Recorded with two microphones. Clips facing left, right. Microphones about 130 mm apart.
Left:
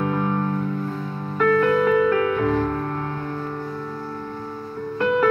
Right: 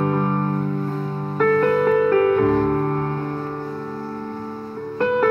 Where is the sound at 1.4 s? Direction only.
40° right (ahead or behind).